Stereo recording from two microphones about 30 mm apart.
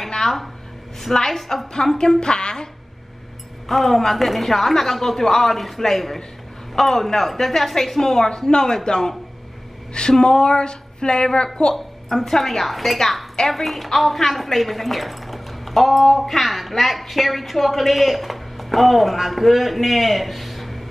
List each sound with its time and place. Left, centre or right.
1.1 s a woman's voice: centre
2.0 s speech: left
3.6 s a woman's voice: centre
8.0 s a woman's voice: centre
10.2 s speech: left
12.2 s speech: centre